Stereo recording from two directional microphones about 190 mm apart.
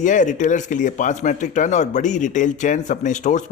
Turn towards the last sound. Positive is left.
turn(degrees=40)  # may be behind; listen again after turning